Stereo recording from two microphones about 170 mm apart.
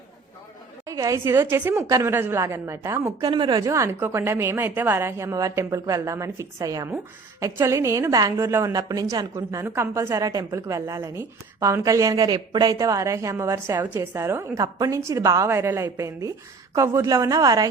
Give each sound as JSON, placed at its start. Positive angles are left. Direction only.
{"t": 0.9, "sound": "a woman's voice", "side_deg": -20}
{"t": 3.7, "sound": "a woman's voice", "side_deg": -15}